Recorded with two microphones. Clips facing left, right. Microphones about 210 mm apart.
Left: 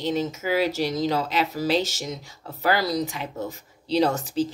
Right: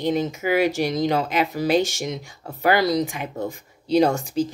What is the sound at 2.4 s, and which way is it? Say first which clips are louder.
Speech: right 4 dB; 55° right (ahead or behind).